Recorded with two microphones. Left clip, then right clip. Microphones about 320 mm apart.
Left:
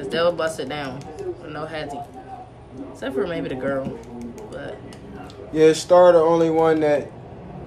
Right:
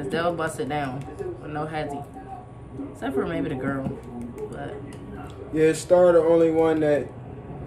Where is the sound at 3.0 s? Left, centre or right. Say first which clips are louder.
Left 2 dB; centre.